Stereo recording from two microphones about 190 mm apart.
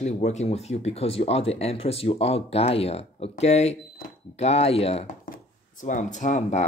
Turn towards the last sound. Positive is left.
turn(degrees=40)  # may be behind; listen again after turning